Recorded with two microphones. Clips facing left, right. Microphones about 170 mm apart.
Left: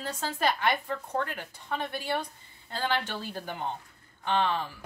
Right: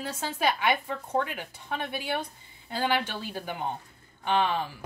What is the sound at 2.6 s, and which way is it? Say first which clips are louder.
Speech: right 3 dB; 10° right (ahead or behind).